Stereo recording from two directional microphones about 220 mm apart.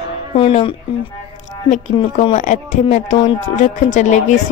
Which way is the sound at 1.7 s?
30° left (ahead or behind).